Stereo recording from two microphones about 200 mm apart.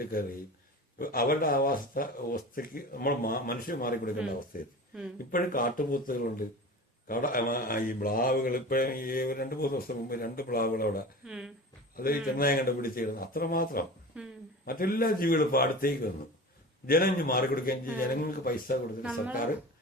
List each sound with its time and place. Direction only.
0.0 s speech: 45° left (ahead or behind)
11.3 s speech: centre (ahead or behind)
11.9 s speech: 45° left (ahead or behind)
14.1 s a woman's voice: 5° right (ahead or behind)
14.6 s speech: 45° left (ahead or behind)
19.0 s speech: 5° right (ahead or behind)